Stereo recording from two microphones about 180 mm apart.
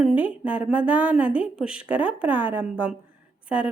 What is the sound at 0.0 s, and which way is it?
Speech, 5° right (ahead or behind).